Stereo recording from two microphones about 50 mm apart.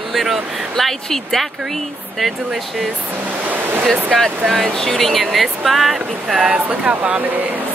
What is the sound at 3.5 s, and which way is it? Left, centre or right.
Waves, right.